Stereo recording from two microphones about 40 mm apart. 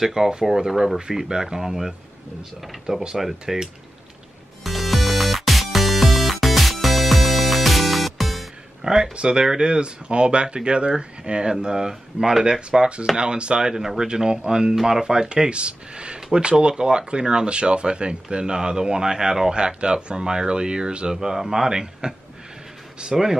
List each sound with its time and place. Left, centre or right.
0.0 s speech: centre
4.6 s music: centre
8.8 s speech: centre
12.4 s speech: right
16.2 s speech: centre
16.4 s speech: right